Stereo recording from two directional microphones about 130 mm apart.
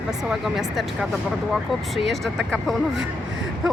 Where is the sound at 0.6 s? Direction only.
Centre (ahead or behind).